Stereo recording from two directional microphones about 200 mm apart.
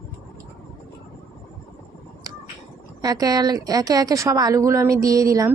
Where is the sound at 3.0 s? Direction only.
20° right (ahead or behind).